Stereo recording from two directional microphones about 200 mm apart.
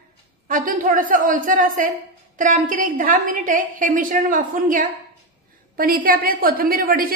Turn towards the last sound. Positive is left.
turn(degrees=-45)  # may be behind; listen again after turning